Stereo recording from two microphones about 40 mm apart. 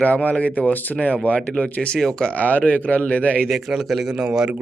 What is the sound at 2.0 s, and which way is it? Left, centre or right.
Speech, centre.